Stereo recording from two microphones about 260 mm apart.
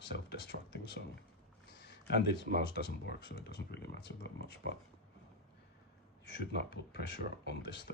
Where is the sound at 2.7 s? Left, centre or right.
Left.